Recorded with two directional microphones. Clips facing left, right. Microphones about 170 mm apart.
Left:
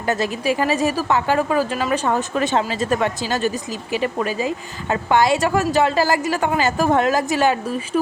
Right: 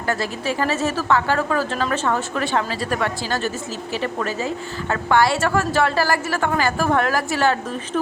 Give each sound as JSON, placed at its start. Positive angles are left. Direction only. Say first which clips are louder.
{"t": 0.0, "sound": "a woman's voice", "louder": "left 3 dB", "side_deg": 20}